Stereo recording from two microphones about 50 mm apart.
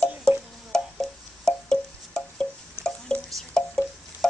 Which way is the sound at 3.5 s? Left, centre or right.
Centre.